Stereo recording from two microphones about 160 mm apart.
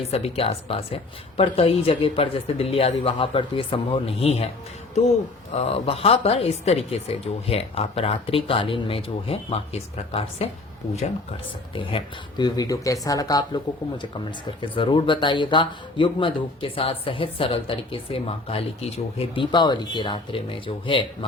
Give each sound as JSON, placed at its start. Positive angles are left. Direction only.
{"t": 0.1, "sound": "speech", "side_deg": 35}
{"t": 5.5, "sound": "speech", "side_deg": 40}
{"t": 11.7, "sound": "speech", "side_deg": 35}